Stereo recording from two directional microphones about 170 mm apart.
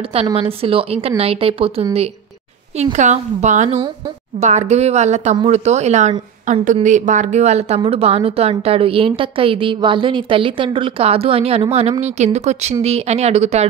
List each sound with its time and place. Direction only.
0.1 s a woman's voice: 35° right (ahead or behind)